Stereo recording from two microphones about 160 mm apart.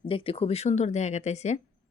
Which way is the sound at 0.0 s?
35° left (ahead or behind).